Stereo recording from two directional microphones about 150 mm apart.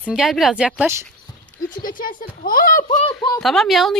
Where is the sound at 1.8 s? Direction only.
70° left (ahead or behind).